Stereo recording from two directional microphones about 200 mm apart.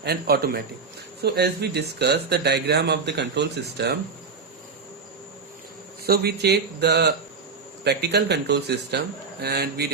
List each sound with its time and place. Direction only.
0.0 s a man's voice: 50° right (ahead or behind)
6.1 s a man's voice: 55° right (ahead or behind)